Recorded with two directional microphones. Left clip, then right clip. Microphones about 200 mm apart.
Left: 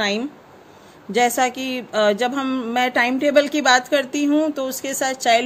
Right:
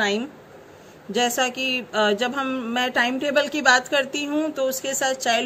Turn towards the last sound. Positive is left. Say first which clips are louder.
# left 4 dB
turn(degrees=40)  # may be behind; listen again after turning